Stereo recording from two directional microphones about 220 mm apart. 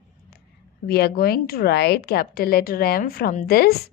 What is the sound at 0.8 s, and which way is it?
A woman's voice, 45° left (ahead or behind).